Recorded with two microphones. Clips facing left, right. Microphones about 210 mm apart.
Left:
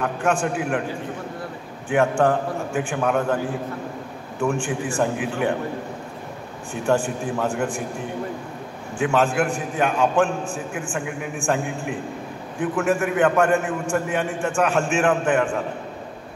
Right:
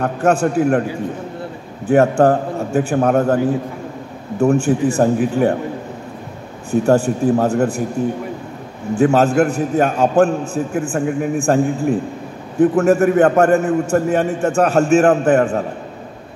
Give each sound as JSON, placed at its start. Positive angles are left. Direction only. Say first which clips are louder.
{"t": 0.0, "sound": "a man's voice", "louder": "right 6 dB", "side_deg": -40}
{"t": 1.9, "sound": "a man's voice", "louder": "right 7 dB", "side_deg": -40}
{"t": 4.4, "sound": "a man's voice", "louder": "right 9 dB", "side_deg": -40}
{"t": 6.7, "sound": "a man's voice", "louder": "right 8 dB", "side_deg": -40}
{"t": 8.9, "sound": "a man's voice", "louder": "right 7 dB", "side_deg": -40}